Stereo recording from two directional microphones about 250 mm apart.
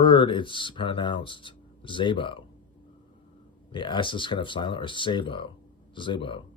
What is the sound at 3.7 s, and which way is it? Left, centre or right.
Speech, centre.